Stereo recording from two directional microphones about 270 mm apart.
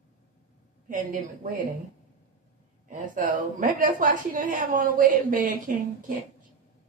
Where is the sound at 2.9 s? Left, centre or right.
Right.